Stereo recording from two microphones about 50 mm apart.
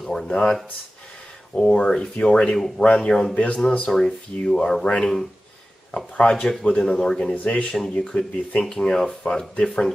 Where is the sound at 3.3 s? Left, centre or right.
Left.